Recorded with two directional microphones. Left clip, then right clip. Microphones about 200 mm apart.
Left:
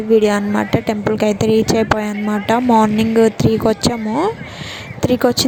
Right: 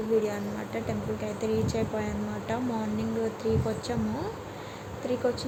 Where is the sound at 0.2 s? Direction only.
50° left (ahead or behind).